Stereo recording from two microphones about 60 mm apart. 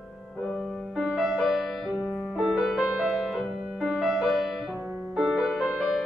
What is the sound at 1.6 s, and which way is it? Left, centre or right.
Music, centre.